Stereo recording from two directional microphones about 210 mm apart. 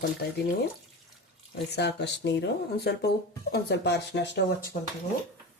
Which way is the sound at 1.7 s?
55° left (ahead or behind).